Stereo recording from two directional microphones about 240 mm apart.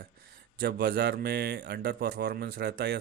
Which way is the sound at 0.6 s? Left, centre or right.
Right.